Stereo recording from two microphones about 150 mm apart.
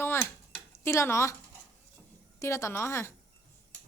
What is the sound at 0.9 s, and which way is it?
Speech, 20° left (ahead or behind).